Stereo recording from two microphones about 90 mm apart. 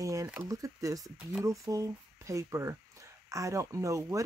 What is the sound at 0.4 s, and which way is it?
Speech, 40° right (ahead or behind).